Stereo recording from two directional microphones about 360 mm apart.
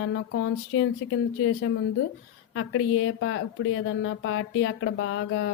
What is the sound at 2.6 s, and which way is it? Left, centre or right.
Speech, left.